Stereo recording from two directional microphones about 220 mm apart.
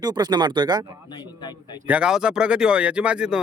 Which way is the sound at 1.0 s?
20° left (ahead or behind).